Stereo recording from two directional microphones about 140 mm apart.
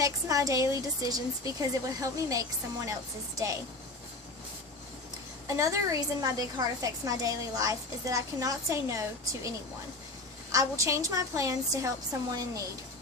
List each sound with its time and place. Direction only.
0.0 s a woman's voice: 25° right (ahead or behind)
5.5 s a woman's voice: 20° right (ahead or behind)
10.5 s a woman's voice: 20° right (ahead or behind)